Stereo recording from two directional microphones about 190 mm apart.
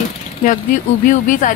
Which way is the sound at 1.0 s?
45° left (ahead or behind).